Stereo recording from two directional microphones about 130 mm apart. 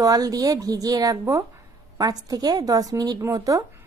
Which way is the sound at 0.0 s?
30° right (ahead or behind).